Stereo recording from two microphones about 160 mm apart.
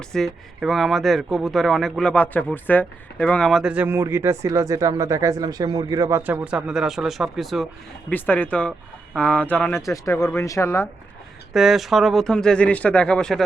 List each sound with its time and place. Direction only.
0.1 s speech: centre (ahead or behind)
8.1 s speech: 10° left (ahead or behind)
9.8 s speech: 20° left (ahead or behind)
11.5 s speech: centre (ahead or behind)